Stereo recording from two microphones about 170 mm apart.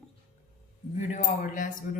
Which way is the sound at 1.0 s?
50° left (ahead or behind).